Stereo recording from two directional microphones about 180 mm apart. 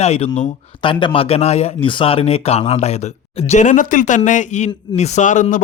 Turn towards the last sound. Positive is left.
turn(degrees=45)  # may be behind; listen again after turning